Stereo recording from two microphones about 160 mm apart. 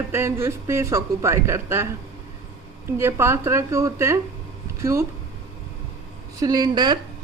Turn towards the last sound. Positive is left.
turn(degrees=-25)  # may be behind; listen again after turning